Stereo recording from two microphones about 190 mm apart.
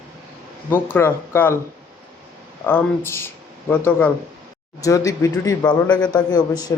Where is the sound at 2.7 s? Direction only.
10° left (ahead or behind).